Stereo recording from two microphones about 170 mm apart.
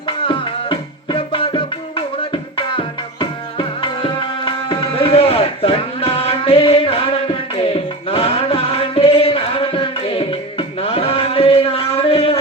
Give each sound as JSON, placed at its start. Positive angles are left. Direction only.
{"t": 0.3, "sound": "music", "side_deg": 30}